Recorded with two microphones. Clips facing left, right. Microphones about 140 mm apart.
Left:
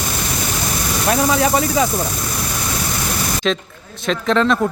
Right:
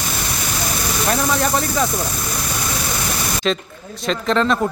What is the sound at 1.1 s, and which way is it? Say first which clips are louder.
Speech: left 4 dB; 5° left (ahead or behind).